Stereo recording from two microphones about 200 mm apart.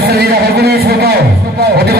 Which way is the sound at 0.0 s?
55° right (ahead or behind).